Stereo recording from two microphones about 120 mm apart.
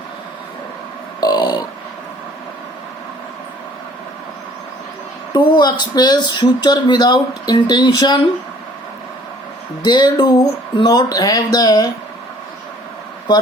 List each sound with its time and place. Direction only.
1.2 s a sound: 35° left (ahead or behind)
5.3 s speech: 40° left (ahead or behind)
9.8 s speech: 35° left (ahead or behind)